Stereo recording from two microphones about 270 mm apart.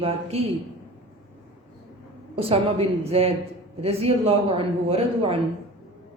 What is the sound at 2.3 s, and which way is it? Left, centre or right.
A man's voice, right.